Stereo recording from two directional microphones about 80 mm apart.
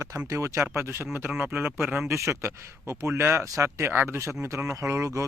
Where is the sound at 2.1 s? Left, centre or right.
Right.